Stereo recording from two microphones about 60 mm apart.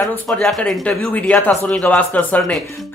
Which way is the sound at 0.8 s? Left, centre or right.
Left.